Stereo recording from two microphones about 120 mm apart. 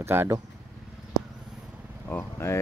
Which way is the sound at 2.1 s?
20° left (ahead or behind).